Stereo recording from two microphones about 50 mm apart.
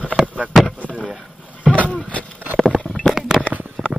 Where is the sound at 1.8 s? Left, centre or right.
Left.